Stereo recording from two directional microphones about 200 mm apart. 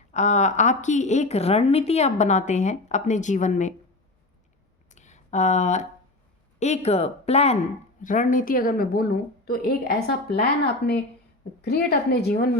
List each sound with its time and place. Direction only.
0.1 s a woman's voice: 35° left (ahead or behind)
4.9 s a sound: 35° left (ahead or behind)
6.6 s a woman's voice: 35° left (ahead or behind); by 12.5 s 55° left (ahead or behind)